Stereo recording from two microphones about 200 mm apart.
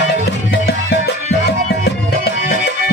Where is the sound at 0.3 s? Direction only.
55° left (ahead or behind).